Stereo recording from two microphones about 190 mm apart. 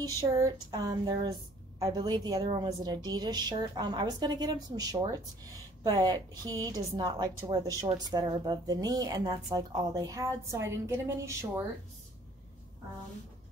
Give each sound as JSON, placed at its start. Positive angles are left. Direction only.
{"t": 0.3, "sound": "a woman's voice", "side_deg": -20}